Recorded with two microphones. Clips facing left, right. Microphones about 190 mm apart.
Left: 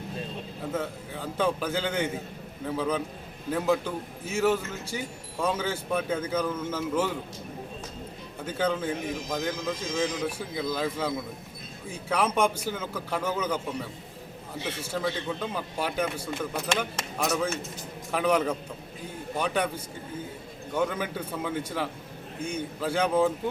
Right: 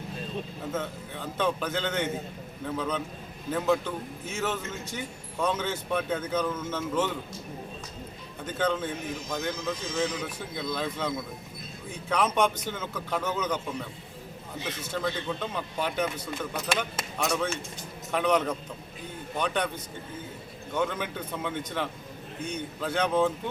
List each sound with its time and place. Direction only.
0.7 s a man's voice: 10° left (ahead or behind)
8.4 s a man's voice: 10° left (ahead or behind)
9.6 s a man's voice: 90° left
10.2 s a man's voice: 10° left (ahead or behind)
14.8 s a man's voice: 10° left (ahead or behind)